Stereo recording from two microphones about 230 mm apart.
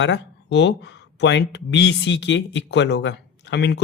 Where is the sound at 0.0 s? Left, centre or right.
Left.